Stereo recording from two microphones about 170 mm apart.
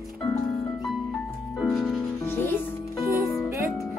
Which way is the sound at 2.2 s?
10° left (ahead or behind).